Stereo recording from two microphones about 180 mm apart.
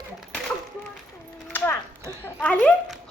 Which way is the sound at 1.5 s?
10° left (ahead or behind).